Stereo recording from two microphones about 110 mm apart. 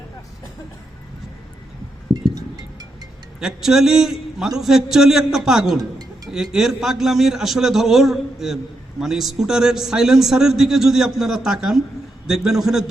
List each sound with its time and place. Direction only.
3.4 s a man's voice: 5° right (ahead or behind)